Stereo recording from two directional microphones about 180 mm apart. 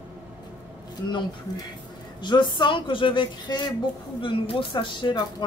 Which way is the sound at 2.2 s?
25° left (ahead or behind).